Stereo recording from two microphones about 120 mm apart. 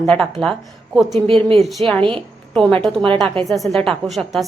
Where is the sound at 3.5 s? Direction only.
Centre (ahead or behind).